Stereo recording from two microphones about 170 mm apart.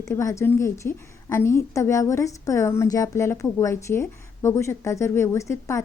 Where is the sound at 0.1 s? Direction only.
15° left (ahead or behind).